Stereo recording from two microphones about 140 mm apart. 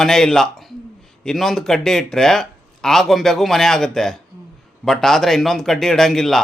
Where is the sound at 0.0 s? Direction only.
5° left (ahead or behind).